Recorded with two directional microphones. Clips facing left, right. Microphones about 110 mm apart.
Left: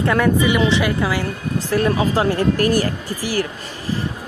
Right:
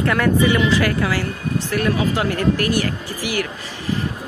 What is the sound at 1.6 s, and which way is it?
A woman's voice, 35° left (ahead or behind).